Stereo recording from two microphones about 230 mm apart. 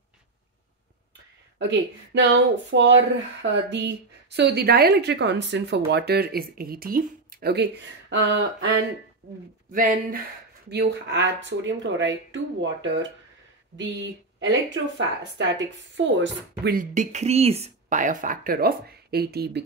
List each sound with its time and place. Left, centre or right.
1.6 s speech: right
9.2 s speech: right
10.7 s speech: right